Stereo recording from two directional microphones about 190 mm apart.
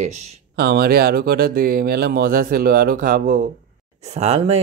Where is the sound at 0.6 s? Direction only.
55° right (ahead or behind).